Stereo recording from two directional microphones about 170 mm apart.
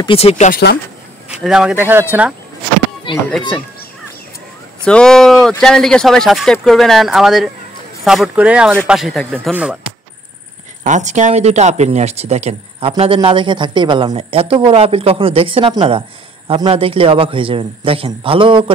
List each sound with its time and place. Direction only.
0.0 s speech: 35° left (ahead or behind)
0.5 s speech: 75° left (ahead or behind)
1.4 s speech: 5° right (ahead or behind)
3.3 s a child's voice: 5° left (ahead or behind)
4.8 s speech: 5° left (ahead or behind)
10.8 s a man's voice: 45° right (ahead or behind); by 18.7 s 30° right (ahead or behind)